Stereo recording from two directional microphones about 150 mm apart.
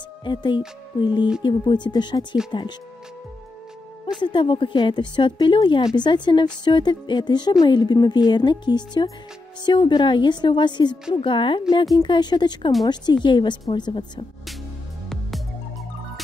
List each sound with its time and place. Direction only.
0.2 s speech: 30° left (ahead or behind)
4.2 s speech: 30° left (ahead or behind)